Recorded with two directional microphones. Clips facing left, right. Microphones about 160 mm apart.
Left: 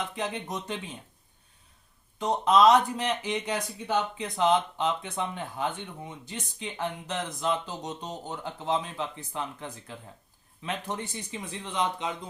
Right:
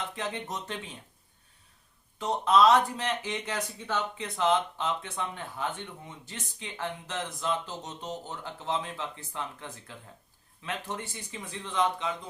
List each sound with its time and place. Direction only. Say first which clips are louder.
0.2 s speech: left 2 dB; 15° left (ahead or behind)
2.1 s speech: left 1 dB; 15° left (ahead or behind)